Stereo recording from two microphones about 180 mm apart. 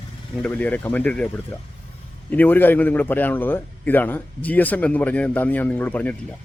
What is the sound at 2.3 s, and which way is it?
A man's voice, 10° left (ahead or behind).